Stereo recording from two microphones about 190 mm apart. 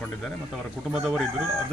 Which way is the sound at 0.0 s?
5° left (ahead or behind).